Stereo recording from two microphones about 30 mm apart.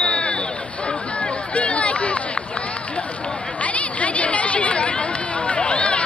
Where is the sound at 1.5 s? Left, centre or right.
Left.